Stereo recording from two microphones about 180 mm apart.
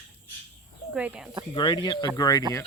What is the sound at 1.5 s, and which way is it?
Speech, 25° left (ahead or behind).